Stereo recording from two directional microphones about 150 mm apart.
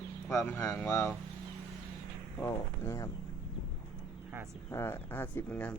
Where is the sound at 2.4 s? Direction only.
20° left (ahead or behind).